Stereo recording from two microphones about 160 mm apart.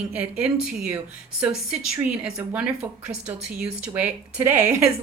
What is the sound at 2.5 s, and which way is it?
A woman's voice, 5° right (ahead or behind).